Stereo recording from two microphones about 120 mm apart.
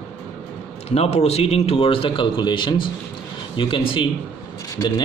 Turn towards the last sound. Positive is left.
turn(degrees=35)  # may be behind; listen again after turning